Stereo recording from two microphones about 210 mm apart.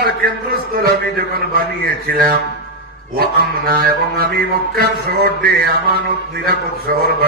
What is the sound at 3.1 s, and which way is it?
Music, 45° right (ahead or behind).